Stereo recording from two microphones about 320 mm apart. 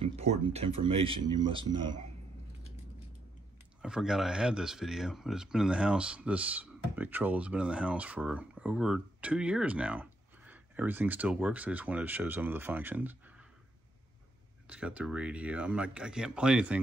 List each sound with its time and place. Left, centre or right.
0.0 s speech: centre
3.8 s speech: centre
14.7 s speech: centre